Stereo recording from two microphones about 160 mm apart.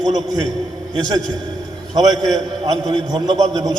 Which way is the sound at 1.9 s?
25° right (ahead or behind).